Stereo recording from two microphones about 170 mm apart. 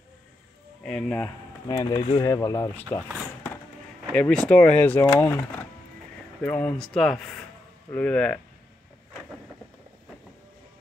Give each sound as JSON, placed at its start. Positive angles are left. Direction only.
{"t": 0.8, "sound": "speech", "side_deg": 5}
{"t": 1.8, "sound": "speech", "side_deg": 25}
{"t": 2.2, "sound": "speech", "side_deg": 20}
{"t": 4.1, "sound": "speech", "side_deg": 5}
{"t": 6.4, "sound": "speech", "side_deg": 5}